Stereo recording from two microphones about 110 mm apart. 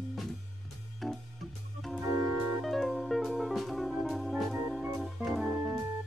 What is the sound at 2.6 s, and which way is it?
Music, centre (ahead or behind).